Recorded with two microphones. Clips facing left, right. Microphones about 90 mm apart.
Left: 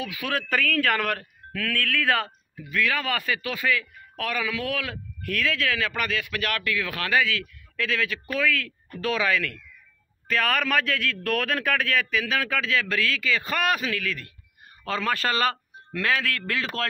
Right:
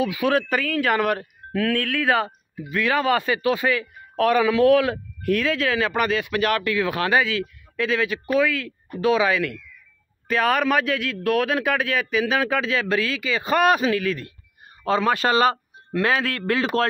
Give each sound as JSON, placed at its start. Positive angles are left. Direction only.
{"t": 0.0, "sound": "speech", "side_deg": -25}
{"t": 0.5, "sound": "speech", "side_deg": -10}